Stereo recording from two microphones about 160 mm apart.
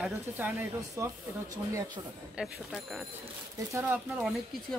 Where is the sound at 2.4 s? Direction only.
5° right (ahead or behind).